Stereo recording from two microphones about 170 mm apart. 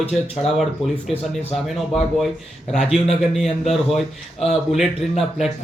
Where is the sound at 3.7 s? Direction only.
Centre (ahead or behind).